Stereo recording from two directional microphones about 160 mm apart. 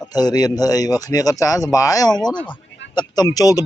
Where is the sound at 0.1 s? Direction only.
25° left (ahead or behind).